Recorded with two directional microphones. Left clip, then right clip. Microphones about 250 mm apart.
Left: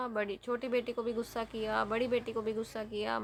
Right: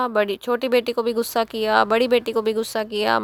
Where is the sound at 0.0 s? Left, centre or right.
Right.